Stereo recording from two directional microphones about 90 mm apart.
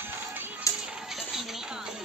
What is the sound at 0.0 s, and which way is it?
Music, 25° right (ahead or behind).